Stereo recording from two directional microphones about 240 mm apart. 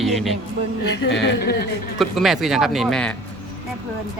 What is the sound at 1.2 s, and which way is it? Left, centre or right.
Speech, left.